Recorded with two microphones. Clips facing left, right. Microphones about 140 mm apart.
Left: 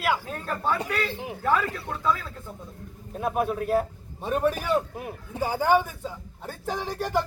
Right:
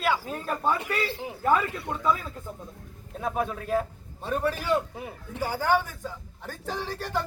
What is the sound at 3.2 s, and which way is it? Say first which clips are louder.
Speech: left 3 dB; 10° left (ahead or behind).